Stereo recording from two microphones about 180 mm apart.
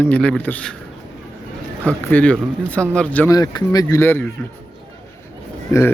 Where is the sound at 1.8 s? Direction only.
10° left (ahead or behind).